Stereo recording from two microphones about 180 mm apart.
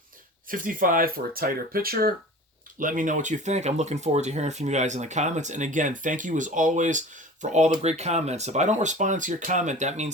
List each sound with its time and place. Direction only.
0.4 s speech: 50° right (ahead or behind)